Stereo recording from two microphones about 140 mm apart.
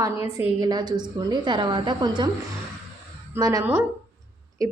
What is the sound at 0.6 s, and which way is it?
A woman's voice, 30° right (ahead or behind).